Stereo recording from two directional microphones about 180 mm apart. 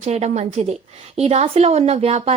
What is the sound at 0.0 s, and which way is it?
Speech, 40° right (ahead or behind).